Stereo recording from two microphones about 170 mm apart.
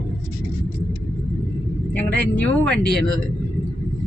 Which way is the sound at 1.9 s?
5° left (ahead or behind).